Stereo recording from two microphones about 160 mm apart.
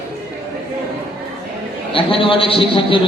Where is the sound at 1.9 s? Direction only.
35° left (ahead or behind).